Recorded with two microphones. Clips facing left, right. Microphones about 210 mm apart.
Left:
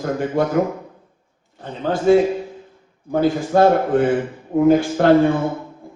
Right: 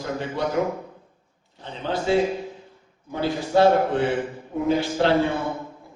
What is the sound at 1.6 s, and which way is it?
A man's voice, 50° left (ahead or behind).